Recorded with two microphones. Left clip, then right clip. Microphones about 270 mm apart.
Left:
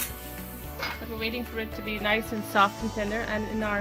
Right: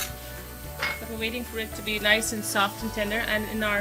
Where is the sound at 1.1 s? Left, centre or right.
Left.